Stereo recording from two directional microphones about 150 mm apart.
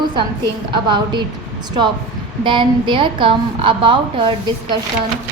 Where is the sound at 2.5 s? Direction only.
35° right (ahead or behind).